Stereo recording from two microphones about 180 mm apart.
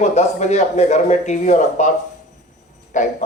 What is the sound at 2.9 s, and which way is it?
Music, 45° left (ahead or behind).